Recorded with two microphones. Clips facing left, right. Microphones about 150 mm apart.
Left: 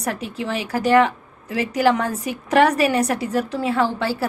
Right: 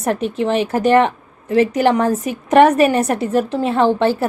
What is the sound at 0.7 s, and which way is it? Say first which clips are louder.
A woman's voice: even; 20° right (ahead or behind).